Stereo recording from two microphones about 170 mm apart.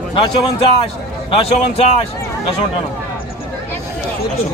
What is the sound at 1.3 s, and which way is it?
Speech, 35° left (ahead or behind).